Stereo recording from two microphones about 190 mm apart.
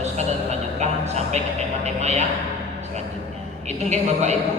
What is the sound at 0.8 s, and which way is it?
A man's voice, 35° right (ahead or behind).